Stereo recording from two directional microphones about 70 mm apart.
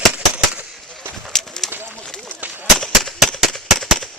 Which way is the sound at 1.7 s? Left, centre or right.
Right.